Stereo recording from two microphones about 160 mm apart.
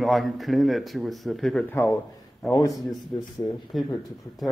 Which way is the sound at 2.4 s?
Centre (ahead or behind).